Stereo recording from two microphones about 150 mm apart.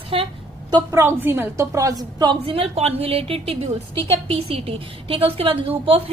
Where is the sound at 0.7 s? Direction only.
20° right (ahead or behind).